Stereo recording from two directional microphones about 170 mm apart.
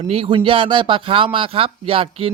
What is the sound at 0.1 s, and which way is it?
Speech, 35° right (ahead or behind).